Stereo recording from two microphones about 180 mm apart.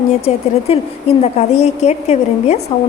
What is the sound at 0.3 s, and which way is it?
A woman's voice, 35° left (ahead or behind).